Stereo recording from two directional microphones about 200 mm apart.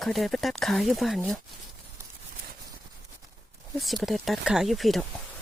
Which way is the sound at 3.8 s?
Centre (ahead or behind).